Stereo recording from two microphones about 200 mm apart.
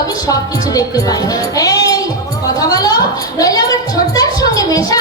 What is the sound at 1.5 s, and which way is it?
Music, 20° left (ahead or behind).